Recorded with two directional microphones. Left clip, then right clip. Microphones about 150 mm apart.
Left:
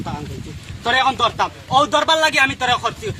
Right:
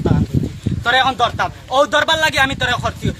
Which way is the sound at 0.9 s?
40° right (ahead or behind).